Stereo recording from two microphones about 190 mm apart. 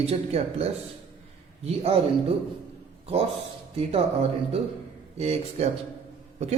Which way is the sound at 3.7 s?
30° right (ahead or behind).